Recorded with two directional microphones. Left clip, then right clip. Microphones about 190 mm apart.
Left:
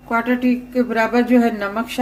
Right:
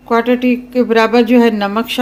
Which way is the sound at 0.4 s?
45° right (ahead or behind).